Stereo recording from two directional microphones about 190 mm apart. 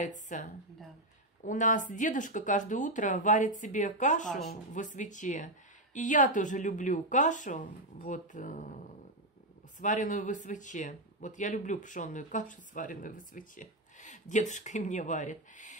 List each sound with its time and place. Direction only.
0.3 s speech: 40° left (ahead or behind)